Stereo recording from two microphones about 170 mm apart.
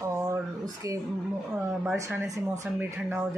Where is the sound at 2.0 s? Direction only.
10° right (ahead or behind).